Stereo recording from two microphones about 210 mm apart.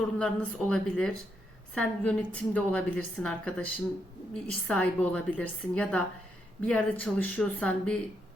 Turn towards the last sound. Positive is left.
turn(degrees=5)  # may be behind; listen again after turning